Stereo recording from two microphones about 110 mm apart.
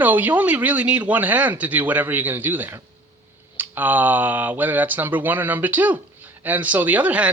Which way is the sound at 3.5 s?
15° right (ahead or behind).